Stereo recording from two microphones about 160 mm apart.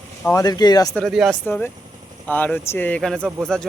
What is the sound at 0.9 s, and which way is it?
Speech, centre (ahead or behind).